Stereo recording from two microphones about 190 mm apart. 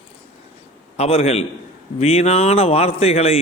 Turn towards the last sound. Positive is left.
turn(degrees=30)  # may be behind; listen again after turning